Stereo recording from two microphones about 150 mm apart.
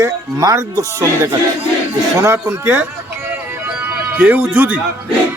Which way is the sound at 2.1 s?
20° right (ahead or behind).